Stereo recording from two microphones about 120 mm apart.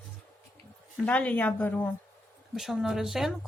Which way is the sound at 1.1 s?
10° left (ahead or behind).